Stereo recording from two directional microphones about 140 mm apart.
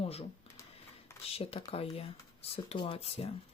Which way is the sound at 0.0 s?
45° left (ahead or behind).